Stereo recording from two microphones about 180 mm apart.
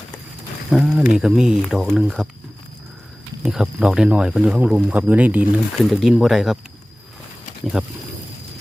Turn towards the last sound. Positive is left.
turn(degrees=-5)  # may be behind; listen again after turning